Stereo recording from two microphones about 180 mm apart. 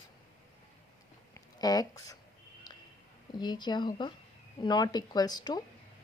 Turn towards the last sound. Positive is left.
turn(degrees=20)  # may be behind; listen again after turning